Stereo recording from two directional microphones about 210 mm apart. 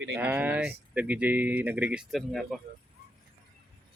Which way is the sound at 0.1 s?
10° right (ahead or behind).